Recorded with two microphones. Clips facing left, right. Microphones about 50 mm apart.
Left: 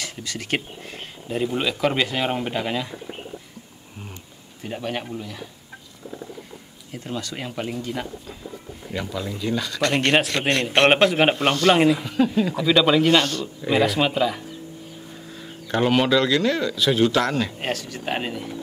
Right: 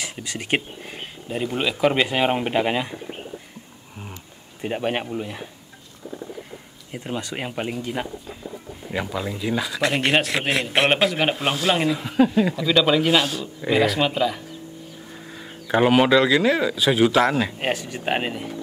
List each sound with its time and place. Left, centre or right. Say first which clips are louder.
0.0 s speech: right 1 dB; centre
2.0 s speech: right 3 dB; right
4.6 s speech: right 4 dB; right
6.9 s speech: right 2 dB; right
7.7 s a man's voice: right 1 dB; centre
11.7 s speech: left 5 dB; centre
12.0 s speech: right 2 dB; centre
12.5 s a man's voice: left 5 dB; centre
15.1 s speech: even; centre